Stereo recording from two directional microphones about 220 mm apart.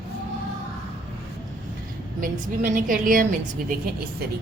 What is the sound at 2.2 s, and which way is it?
A woman's voice, 40° right (ahead or behind).